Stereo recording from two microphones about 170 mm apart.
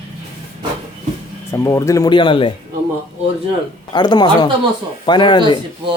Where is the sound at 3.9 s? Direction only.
25° left (ahead or behind).